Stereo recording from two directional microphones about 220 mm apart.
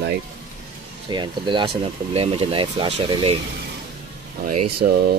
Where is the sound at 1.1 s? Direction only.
20° right (ahead or behind).